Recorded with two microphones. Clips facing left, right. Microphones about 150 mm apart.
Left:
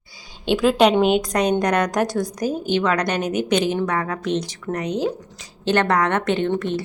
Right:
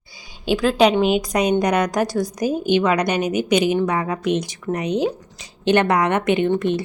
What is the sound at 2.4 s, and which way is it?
A woman's voice, 15° right (ahead or behind).